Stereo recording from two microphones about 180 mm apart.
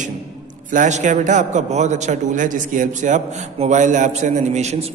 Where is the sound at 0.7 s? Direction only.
45° right (ahead or behind).